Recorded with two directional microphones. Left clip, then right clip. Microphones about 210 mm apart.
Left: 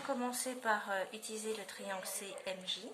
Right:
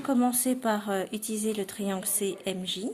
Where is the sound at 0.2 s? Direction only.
50° right (ahead or behind).